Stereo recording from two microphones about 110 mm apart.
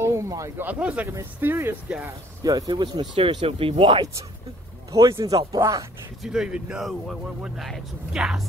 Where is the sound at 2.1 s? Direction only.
35° right (ahead or behind).